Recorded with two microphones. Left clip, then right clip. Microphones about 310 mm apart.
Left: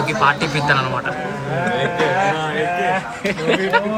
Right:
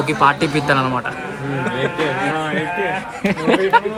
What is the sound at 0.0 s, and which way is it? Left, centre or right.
Speech, centre.